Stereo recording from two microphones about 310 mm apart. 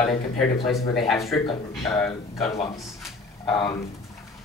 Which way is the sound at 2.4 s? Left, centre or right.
Centre.